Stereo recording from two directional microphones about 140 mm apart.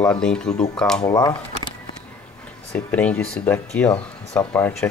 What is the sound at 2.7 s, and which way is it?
Speech, 10° left (ahead or behind).